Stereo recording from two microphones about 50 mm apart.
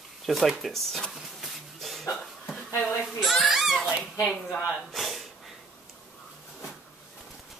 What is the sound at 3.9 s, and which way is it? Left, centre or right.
Goose, right.